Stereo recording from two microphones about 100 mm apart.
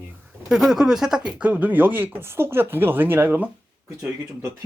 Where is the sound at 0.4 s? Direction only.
5° right (ahead or behind).